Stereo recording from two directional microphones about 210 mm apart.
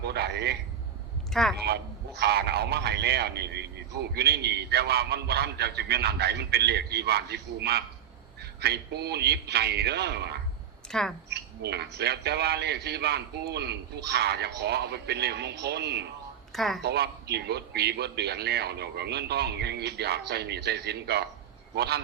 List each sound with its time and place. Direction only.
0.0 s a sound: 50° right (ahead or behind)
1.3 s speech: centre (ahead or behind)
1.6 s a man's voice: 50° right (ahead or behind)
10.9 s speech: 5° left (ahead or behind)
11.3 s a man's voice: 55° right (ahead or behind)
16.5 s a woman's voice: centre (ahead or behind)
16.8 s a man's voice: 50° right (ahead or behind)